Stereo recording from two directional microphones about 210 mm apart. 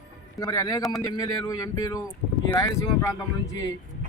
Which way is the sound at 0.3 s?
15° left (ahead or behind).